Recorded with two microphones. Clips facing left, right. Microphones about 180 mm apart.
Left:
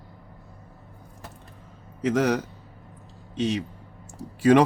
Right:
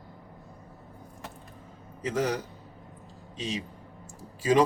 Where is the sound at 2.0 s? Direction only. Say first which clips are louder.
Left 6 dB; 75° left (ahead or behind).